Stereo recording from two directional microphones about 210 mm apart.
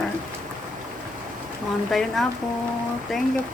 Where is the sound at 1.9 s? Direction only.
Centre (ahead or behind).